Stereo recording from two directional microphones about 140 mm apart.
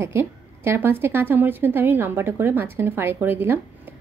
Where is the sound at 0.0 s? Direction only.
15° right (ahead or behind).